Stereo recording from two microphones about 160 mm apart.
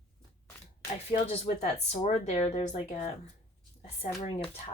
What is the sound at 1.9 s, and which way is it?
Speech, 40° left (ahead or behind).